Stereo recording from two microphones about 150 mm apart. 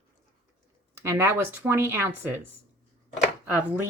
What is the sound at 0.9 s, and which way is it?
Speech, 20° right (ahead or behind).